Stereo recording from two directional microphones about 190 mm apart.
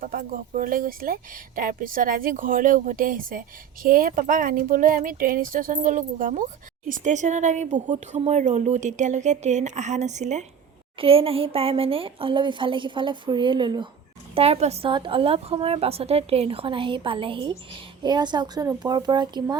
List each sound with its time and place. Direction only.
0.0 s a woman's voice: 45° right (ahead or behind); by 19.5 s 25° right (ahead or behind)